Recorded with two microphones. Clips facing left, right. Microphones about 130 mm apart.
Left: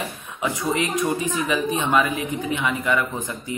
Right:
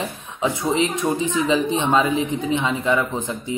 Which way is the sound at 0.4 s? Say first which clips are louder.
Right 3 dB; 20° right (ahead or behind).